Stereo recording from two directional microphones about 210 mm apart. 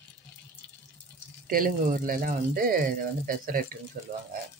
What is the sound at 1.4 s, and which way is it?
Speech, 40° right (ahead or behind).